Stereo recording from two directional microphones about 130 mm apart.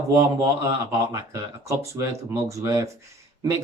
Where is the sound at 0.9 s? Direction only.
25° right (ahead or behind).